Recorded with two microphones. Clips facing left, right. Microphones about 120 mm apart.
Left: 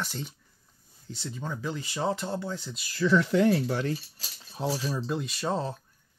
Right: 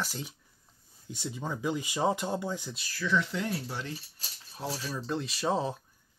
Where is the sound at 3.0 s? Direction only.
45° left (ahead or behind); by 4.2 s 75° left (ahead or behind).